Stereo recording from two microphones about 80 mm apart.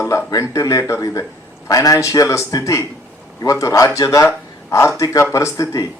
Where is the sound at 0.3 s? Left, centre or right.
Left.